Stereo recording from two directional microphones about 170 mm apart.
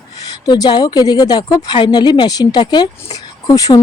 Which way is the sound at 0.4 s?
25° left (ahead or behind).